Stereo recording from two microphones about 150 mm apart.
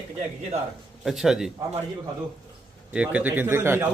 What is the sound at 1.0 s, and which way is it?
Speech, centre (ahead or behind).